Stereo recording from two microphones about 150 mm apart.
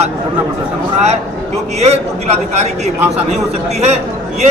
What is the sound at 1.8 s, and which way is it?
Speech, 45° right (ahead or behind).